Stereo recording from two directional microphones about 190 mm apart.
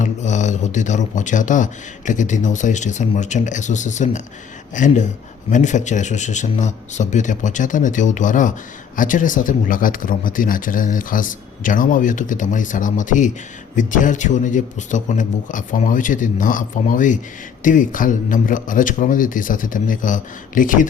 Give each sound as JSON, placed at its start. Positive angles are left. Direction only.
{"t": 0.0, "sound": "a man's voice", "side_deg": 40}